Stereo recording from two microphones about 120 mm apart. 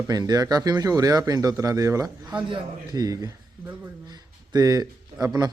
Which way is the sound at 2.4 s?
40° right (ahead or behind).